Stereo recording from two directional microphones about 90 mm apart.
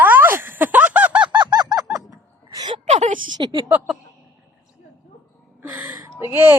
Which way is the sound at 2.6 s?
90° right.